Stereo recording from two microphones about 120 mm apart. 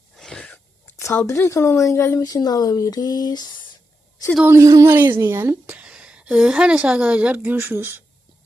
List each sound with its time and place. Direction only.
0.2 s a sound: 5° left (ahead or behind)
0.5 s speech: 20° left (ahead or behind)
4.4 s a woman's voice: 25° right (ahead or behind)
5.6 s a woman's voice: 10° right (ahead or behind)